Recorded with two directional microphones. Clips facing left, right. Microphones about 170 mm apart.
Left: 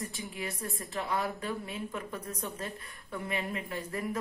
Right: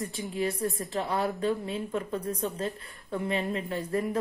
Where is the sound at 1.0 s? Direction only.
30° right (ahead or behind).